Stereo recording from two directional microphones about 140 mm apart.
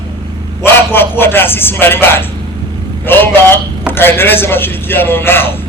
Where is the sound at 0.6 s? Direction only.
15° left (ahead or behind).